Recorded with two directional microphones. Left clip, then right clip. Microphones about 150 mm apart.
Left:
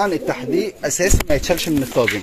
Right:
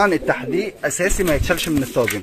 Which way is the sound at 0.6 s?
15° left (ahead or behind).